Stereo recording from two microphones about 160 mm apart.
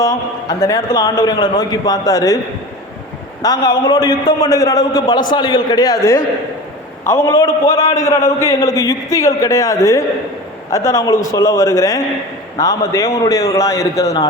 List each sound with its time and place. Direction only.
0.0 s a man's voice: 20° left (ahead or behind)
3.4 s a man's voice: 25° left (ahead or behind)